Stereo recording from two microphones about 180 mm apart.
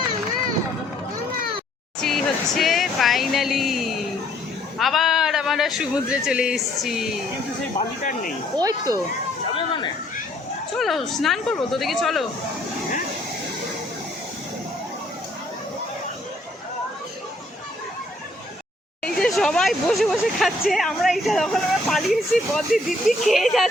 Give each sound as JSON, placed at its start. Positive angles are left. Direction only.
{"t": 2.0, "sound": "speech", "side_deg": 5}
{"t": 8.5, "sound": "speech", "side_deg": -20}
{"t": 9.6, "sound": "a sound", "side_deg": 30}
{"t": 10.8, "sound": "speech", "side_deg": 0}
{"t": 19.0, "sound": "speech", "side_deg": 5}